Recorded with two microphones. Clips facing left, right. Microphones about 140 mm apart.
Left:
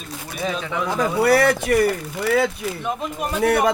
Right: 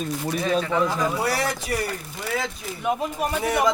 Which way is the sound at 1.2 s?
65° left (ahead or behind).